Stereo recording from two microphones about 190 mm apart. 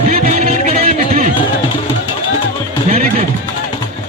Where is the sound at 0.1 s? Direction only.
35° right (ahead or behind).